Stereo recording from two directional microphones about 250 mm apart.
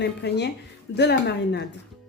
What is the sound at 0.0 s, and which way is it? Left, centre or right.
Speech, left.